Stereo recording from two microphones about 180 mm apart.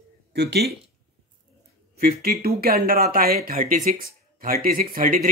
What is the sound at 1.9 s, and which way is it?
Speech, 60° right (ahead or behind).